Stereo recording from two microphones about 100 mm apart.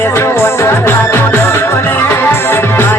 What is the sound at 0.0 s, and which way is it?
Music, 25° left (ahead or behind).